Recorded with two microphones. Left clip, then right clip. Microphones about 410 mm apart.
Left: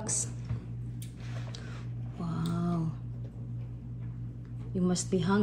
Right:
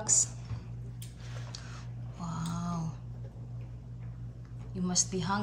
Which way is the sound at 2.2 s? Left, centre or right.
Right.